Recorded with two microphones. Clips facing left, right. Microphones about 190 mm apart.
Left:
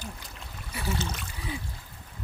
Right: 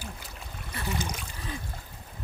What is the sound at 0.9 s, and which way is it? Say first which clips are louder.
Speech: even; 15° right (ahead or behind).